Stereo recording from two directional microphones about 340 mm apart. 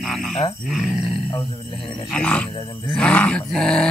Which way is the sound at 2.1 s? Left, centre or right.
Centre.